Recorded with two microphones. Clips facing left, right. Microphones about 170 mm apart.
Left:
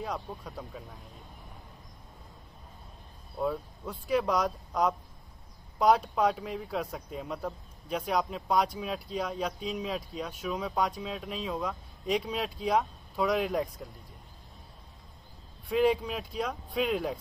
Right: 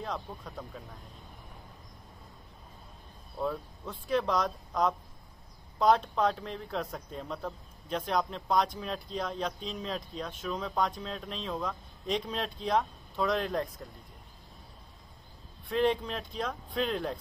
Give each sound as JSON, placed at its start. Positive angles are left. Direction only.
{"t": 0.0, "sound": "speech", "side_deg": 10}
{"t": 3.3, "sound": "speech", "side_deg": 10}
{"t": 15.7, "sound": "speech", "side_deg": 10}